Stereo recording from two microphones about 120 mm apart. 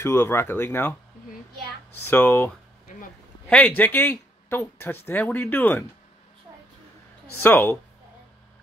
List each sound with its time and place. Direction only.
0.0 s speech: 20° left (ahead or behind)
2.0 s speech: 20° left (ahead or behind)
7.3 s speech: 20° left (ahead or behind)